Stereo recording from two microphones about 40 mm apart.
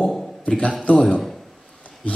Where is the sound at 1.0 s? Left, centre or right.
Centre.